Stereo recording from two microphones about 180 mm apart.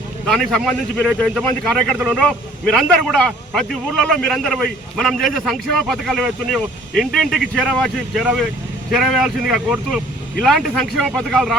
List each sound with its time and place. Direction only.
0.3 s a man's voice: centre (ahead or behind)